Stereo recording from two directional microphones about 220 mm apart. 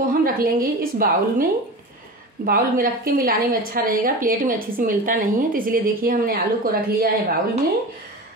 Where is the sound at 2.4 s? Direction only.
40° right (ahead or behind).